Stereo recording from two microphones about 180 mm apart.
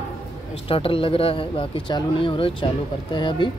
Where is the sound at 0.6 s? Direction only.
30° left (ahead or behind).